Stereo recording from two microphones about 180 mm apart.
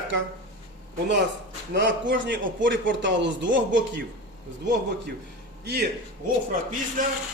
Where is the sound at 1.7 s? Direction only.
75° right (ahead or behind).